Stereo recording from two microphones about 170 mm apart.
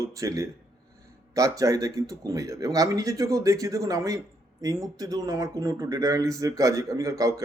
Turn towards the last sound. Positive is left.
turn(degrees=-20)  # may be behind; listen again after turning